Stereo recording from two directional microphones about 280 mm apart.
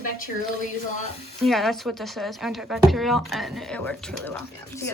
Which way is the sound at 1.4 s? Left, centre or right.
Centre.